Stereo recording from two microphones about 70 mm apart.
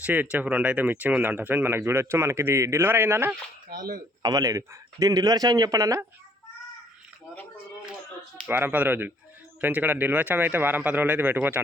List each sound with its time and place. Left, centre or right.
0.0 s a man's voice: right
4.2 s speech: right
4.4 s speech: right
8.4 s speech: right